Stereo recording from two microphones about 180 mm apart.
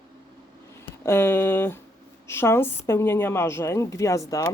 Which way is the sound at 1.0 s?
15° left (ahead or behind).